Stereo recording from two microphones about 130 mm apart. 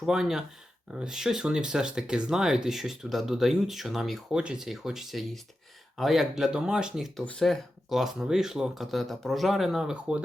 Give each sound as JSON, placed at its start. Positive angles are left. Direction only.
{"t": 0.0, "sound": "speech", "side_deg": -5}